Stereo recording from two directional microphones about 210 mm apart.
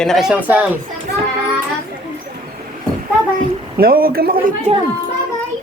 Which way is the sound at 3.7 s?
45° right (ahead or behind).